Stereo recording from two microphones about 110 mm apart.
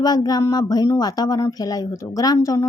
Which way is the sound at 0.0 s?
35° left (ahead or behind).